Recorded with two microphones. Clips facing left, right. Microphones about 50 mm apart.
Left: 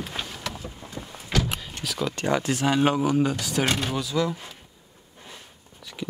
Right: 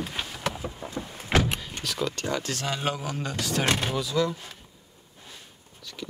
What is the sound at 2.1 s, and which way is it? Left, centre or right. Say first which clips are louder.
Speech: left 5 dB; left.